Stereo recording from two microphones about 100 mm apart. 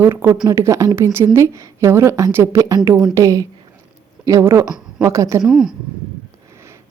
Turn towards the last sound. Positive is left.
turn(degrees=-5)  # may be behind; listen again after turning